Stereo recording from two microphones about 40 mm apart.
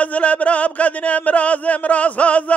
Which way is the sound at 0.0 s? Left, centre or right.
Left.